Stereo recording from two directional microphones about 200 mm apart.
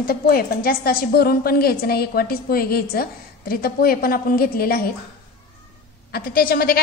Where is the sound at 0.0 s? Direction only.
45° left (ahead or behind).